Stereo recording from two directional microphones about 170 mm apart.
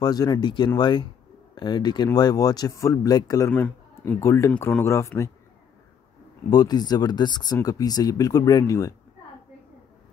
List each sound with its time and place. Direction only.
0.0 s speech: 25° left (ahead or behind)
6.5 s speech: 25° left (ahead or behind)